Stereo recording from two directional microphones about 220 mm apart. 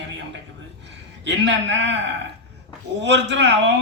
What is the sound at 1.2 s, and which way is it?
Speech, 55° right (ahead or behind).